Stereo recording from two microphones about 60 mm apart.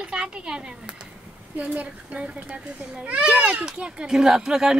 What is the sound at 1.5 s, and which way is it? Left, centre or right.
A child's voice, right.